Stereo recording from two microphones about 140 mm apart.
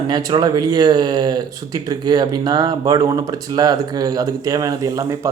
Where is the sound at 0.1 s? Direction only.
25° right (ahead or behind).